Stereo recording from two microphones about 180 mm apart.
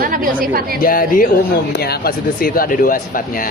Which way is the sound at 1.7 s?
60° left (ahead or behind).